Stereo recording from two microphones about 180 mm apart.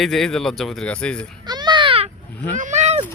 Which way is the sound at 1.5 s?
25° right (ahead or behind).